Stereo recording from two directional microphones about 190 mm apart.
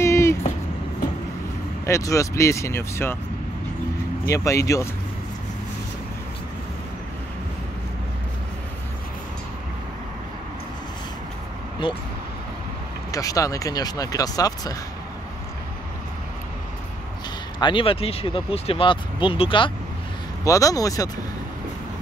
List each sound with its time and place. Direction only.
0.0 s vehicle: 15° left (ahead or behind)
1.9 s speech: 15° left (ahead or behind)
4.3 s speech: 15° left (ahead or behind)
11.8 s speech: 25° left (ahead or behind)
13.1 s speech: 20° left (ahead or behind)
17.6 s speech: 25° left (ahead or behind)